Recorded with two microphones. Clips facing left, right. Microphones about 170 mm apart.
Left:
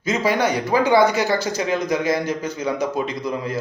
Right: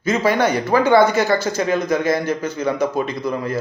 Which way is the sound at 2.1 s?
15° left (ahead or behind).